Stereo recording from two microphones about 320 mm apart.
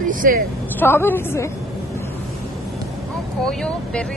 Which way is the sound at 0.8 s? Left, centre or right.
Centre.